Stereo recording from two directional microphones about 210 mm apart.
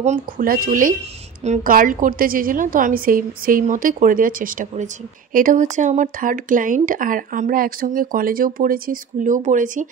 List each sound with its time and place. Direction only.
0.0 s speech: 40° right (ahead or behind)